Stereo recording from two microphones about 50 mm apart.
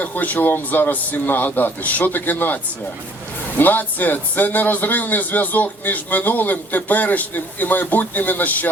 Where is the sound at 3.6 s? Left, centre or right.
Left.